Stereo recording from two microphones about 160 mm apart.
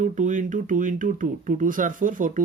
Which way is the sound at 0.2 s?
55° right (ahead or behind).